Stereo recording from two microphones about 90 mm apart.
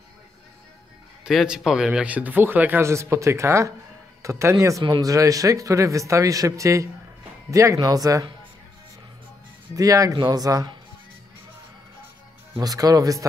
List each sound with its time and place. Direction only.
1.2 s speech: 5° right (ahead or behind)
2.8 s speech: 30° right (ahead or behind)
9.8 s speech: 40° right (ahead or behind)
10.1 s speech: 50° right (ahead or behind)
12.5 s speech: 40° right (ahead or behind)